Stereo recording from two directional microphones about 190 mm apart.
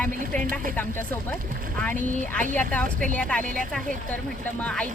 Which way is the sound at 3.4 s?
45° right (ahead or behind).